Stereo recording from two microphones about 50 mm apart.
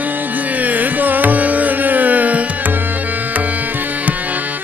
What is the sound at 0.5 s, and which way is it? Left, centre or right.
Tabla, right.